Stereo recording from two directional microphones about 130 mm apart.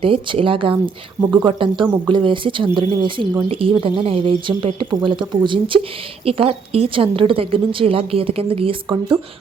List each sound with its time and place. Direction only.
0.0 s a woman's voice: 45° right (ahead or behind)